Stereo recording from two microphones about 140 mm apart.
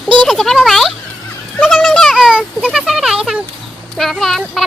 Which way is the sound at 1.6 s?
Centre (ahead or behind).